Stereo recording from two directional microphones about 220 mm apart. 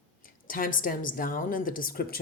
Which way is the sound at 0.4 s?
40° left (ahead or behind).